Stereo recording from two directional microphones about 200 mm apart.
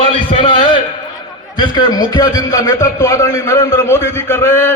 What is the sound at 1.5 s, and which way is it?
A man's voice, 20° left (ahead or behind).